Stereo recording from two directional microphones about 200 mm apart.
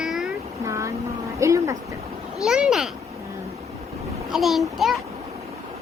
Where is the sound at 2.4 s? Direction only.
5° right (ahead or behind).